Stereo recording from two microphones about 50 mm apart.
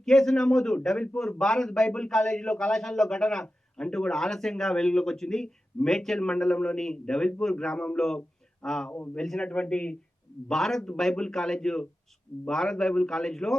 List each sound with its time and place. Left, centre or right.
0.0 s a man's voice: centre